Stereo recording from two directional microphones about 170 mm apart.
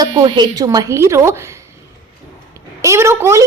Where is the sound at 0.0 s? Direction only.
25° right (ahead or behind).